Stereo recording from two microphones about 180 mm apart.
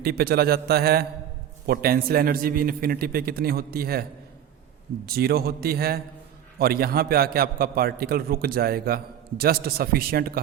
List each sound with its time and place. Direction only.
0.0 s a man's voice: 60° right (ahead or behind)
5.0 s a man's voice: 60° right (ahead or behind)